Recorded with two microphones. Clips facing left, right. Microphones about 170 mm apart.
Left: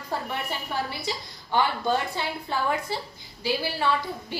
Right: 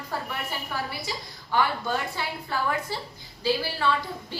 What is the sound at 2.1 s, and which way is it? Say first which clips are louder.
A woman's voice: left 1 dB; 20° left (ahead or behind).